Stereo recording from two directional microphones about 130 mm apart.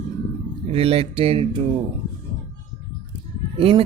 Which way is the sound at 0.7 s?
50° right (ahead or behind).